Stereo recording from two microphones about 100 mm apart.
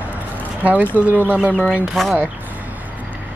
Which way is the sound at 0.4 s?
15° right (ahead or behind).